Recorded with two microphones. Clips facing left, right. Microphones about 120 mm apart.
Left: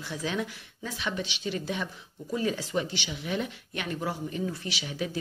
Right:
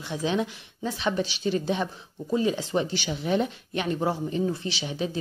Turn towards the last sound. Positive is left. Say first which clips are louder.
# right 4 dB
turn(degrees=-25)  # may be behind; listen again after turning